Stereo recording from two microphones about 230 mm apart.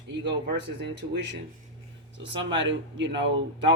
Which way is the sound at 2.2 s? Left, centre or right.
Right.